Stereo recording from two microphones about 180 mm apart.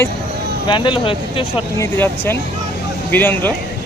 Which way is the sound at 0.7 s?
30° left (ahead or behind).